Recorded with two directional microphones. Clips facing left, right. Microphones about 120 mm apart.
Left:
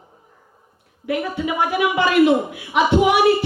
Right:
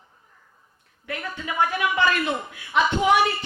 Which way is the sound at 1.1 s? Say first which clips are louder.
Left 9 dB; 15° left (ahead or behind).